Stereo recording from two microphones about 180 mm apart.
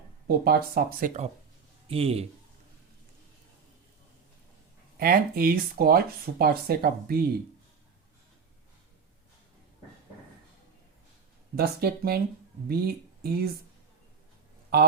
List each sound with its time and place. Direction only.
0.3 s speech: 60° right (ahead or behind)
1.9 s a man's voice: 30° right (ahead or behind)
4.9 s speech: 55° right (ahead or behind)
11.5 s speech: 60° right (ahead or behind)